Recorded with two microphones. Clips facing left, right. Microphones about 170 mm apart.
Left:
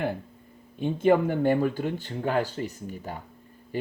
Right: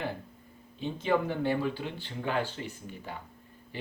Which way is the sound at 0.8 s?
50° left (ahead or behind).